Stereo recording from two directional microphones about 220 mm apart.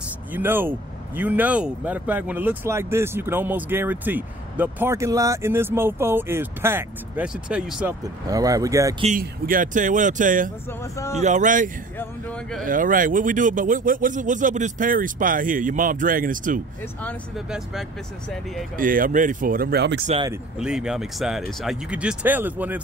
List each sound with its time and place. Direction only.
0.3 s speech: 10° right (ahead or behind)
8.3 s speech: 15° right (ahead or behind)
9.0 s speech: 40° right (ahead or behind)
12.0 s speech: 5° left (ahead or behind)
12.6 s speech: 40° right (ahead or behind)
18.8 s speech: 40° right (ahead or behind)
20.5 s speech: 5° right (ahead or behind)